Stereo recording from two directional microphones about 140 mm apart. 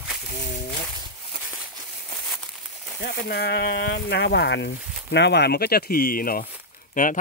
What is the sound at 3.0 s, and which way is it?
Speech, 90° left.